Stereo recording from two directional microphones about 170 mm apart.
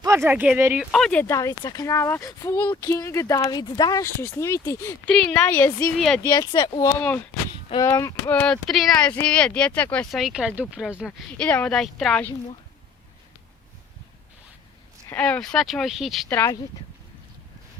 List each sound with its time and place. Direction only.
0.0 s speech: 15° right (ahead or behind)
0.9 s speech: 5° left (ahead or behind)
5.1 s speech: 5° left (ahead or behind)
15.1 s speech: 5° left (ahead or behind)
16.3 s speech: 10° left (ahead or behind)